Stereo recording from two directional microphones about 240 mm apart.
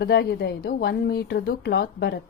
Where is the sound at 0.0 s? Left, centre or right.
Left.